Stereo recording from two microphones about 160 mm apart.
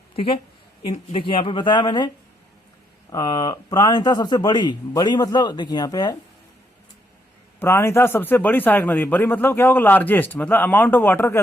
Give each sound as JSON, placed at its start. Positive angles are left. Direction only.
{"t": 1.1, "sound": "speech", "side_deg": 30}
{"t": 3.1, "sound": "speech", "side_deg": 25}
{"t": 7.6, "sound": "a man's voice", "side_deg": 15}